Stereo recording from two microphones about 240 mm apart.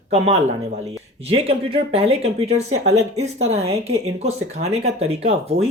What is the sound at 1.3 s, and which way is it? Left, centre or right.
Speech, right.